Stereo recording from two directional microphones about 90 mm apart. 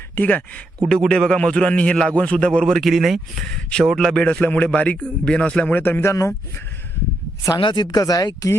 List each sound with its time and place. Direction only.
0.2 s a man's voice: 15° left (ahead or behind); by 3.4 s centre (ahead or behind)
3.5 s a man's voice: 10° left (ahead or behind); by 6.3 s 30° left (ahead or behind)
7.6 s speech: 55° left (ahead or behind)